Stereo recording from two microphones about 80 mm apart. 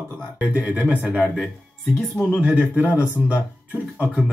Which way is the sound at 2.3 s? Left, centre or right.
Centre.